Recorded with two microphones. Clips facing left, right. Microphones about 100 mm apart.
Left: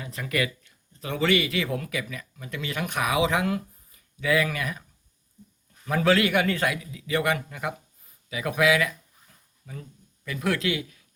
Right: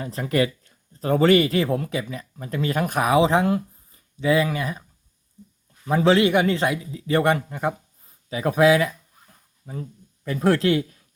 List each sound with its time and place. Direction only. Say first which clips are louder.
0.0 s speech: right 6 dB; 35° right (ahead or behind)
5.8 s a man's voice: right 4 dB; 25° right (ahead or behind)